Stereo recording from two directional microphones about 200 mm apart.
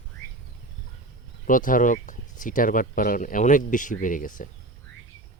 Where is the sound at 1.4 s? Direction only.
40° left (ahead or behind).